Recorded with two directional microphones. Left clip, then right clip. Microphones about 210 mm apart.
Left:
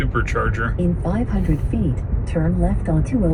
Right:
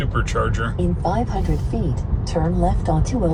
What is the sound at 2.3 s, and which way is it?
Speech, 45° right (ahead or behind).